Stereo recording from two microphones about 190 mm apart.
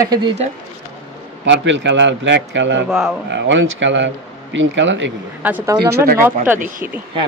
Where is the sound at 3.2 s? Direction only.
70° right (ahead or behind).